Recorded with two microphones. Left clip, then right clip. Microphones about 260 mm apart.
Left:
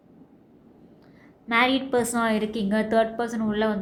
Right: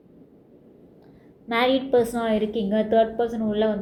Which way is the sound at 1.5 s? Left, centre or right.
Centre.